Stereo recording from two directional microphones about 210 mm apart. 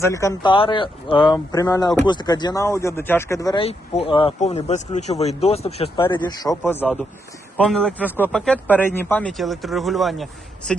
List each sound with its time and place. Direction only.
0.0 s speech: 15° left (ahead or behind)
6.7 s speech: 10° left (ahead or behind)